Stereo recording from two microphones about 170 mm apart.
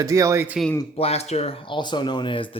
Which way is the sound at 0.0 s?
20° right (ahead or behind).